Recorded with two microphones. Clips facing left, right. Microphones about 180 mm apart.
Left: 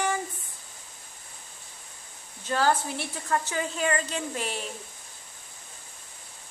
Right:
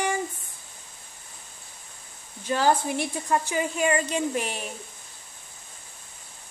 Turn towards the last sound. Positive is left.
turn(degrees=-15)  # may be behind; listen again after turning